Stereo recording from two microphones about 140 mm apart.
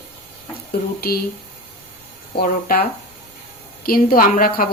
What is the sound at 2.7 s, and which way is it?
Speech, 90° left.